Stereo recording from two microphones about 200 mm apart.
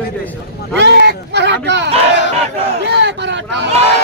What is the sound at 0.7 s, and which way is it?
Speech, 60° right (ahead or behind).